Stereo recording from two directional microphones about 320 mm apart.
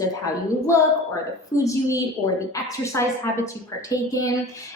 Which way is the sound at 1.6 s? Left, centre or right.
Centre.